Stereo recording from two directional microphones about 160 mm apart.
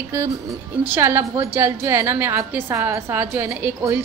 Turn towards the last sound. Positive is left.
turn(degrees=-15)  # may be behind; listen again after turning